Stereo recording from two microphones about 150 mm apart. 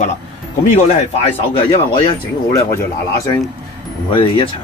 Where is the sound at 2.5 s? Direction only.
20° left (ahead or behind).